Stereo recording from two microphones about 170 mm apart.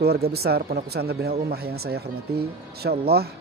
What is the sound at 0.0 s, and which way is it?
Speech, 70° right (ahead or behind).